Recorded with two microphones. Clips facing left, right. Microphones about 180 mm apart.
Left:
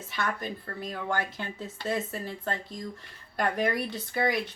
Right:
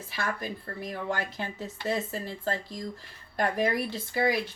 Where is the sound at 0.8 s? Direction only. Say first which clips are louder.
Left 1 dB; 25° right (ahead or behind).